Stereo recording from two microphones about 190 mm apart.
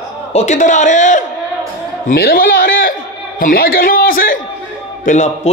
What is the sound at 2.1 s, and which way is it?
A man's voice, 50° left (ahead or behind).